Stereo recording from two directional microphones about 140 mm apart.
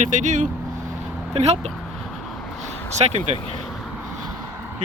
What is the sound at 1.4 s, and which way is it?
Speech, 50° right (ahead or behind).